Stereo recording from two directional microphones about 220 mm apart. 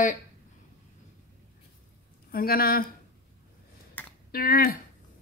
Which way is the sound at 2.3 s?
45° left (ahead or behind).